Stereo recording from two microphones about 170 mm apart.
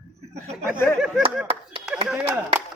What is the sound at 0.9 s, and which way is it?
Speech, centre (ahead or behind).